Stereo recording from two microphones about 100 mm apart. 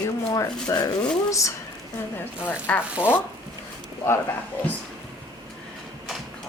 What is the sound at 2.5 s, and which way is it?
Speech, 20° left (ahead or behind).